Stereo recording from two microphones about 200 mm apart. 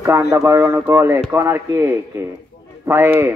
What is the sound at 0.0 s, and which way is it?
Speech, 15° right (ahead or behind).